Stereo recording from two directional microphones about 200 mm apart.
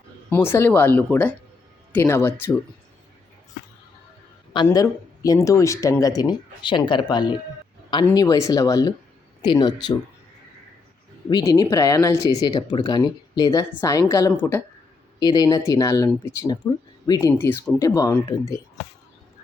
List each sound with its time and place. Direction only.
0.3 s speech: 10° left (ahead or behind)
4.5 s speech: 20° left (ahead or behind)
11.3 s speech: 20° left (ahead or behind)